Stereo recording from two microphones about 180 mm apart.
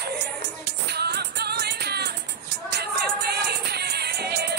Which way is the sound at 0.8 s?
65° right (ahead or behind).